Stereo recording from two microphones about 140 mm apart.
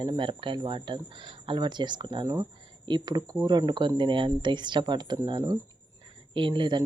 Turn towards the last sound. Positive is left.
turn(degrees=-35)  # may be behind; listen again after turning